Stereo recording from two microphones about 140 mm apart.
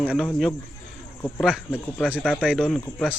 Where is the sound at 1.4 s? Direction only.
5° right (ahead or behind).